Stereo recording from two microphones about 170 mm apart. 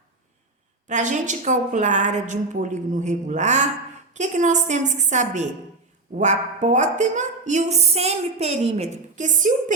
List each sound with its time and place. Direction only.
0.9 s speech: 45° right (ahead or behind)